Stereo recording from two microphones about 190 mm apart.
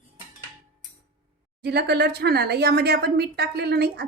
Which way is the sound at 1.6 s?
60° right (ahead or behind).